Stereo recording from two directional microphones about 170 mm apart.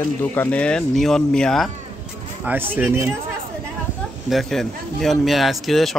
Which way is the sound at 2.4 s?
10° right (ahead or behind).